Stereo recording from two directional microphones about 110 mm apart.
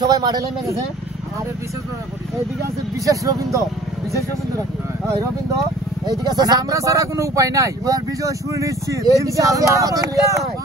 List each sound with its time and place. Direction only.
0.0 s speech: 35° right (ahead or behind)
3.1 s speech: 30° right (ahead or behind)
6.0 s speech: 35° right (ahead or behind)